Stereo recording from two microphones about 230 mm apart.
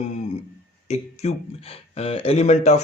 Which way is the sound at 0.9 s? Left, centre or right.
Left.